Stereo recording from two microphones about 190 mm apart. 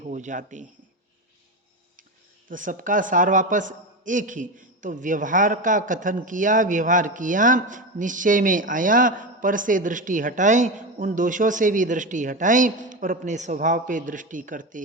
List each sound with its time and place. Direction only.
0.0 s a man's voice: 40° right (ahead or behind)
2.5 s a man's voice: 45° right (ahead or behind)